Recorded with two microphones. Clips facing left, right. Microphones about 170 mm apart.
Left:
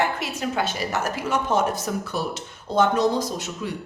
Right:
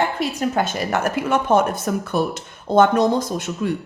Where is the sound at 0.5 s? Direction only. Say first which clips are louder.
Right 4 dB; 50° right (ahead or behind).